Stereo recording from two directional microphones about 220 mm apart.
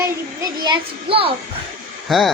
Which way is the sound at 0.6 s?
20° right (ahead or behind).